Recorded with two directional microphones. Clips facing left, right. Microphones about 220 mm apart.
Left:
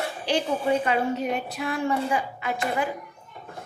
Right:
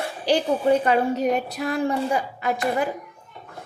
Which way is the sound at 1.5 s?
40° right (ahead or behind).